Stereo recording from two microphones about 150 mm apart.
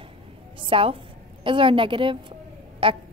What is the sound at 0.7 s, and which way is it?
A woman's voice, 35° right (ahead or behind).